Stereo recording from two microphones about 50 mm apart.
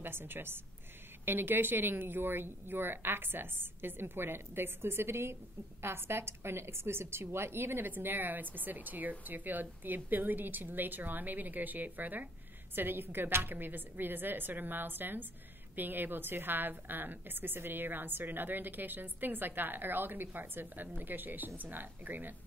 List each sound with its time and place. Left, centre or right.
0.0 s a woman's voice: right